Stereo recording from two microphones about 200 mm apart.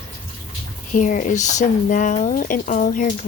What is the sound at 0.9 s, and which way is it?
Speech, 40° left (ahead or behind).